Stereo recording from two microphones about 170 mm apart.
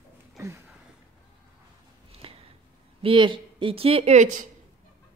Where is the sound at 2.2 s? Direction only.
35° right (ahead or behind).